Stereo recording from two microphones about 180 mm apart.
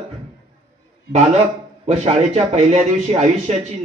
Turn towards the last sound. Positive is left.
turn(degrees=-40)  # may be behind; listen again after turning